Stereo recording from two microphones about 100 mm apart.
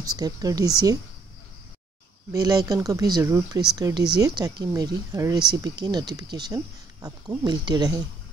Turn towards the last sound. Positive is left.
turn(degrees=-40)  # may be behind; listen again after turning